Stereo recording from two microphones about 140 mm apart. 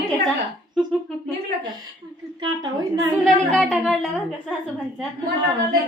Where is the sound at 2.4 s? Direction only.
30° right (ahead or behind).